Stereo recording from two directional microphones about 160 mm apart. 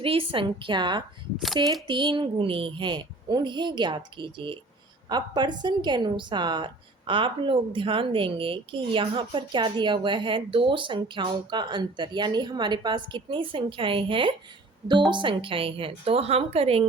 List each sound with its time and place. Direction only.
0.0 s a woman's voice: 35° right (ahead or behind)